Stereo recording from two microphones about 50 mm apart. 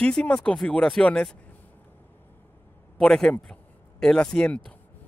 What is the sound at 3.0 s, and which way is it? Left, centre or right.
Speech, centre.